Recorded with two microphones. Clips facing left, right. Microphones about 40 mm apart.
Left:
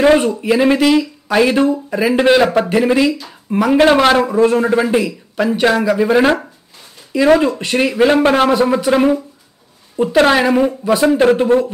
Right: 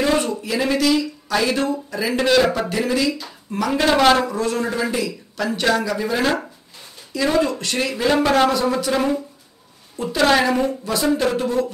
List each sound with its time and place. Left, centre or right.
0.0 s speech: left
3.1 s speech: centre
3.5 s speech: left
10.2 s speech: left